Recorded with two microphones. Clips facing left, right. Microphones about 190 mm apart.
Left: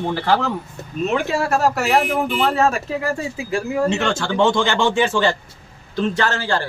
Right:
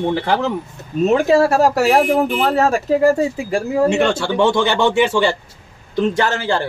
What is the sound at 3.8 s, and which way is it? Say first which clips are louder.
Speech: right 4 dB; 10° right (ahead or behind).